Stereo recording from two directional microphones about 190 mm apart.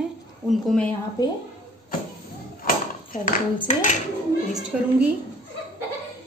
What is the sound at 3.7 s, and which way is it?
Dishes, 40° left (ahead or behind).